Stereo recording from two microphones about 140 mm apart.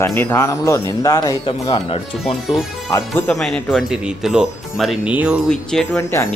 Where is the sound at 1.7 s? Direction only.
45° left (ahead or behind).